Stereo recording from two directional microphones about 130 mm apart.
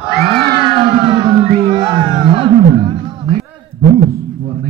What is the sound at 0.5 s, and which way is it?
Music, 40° right (ahead or behind).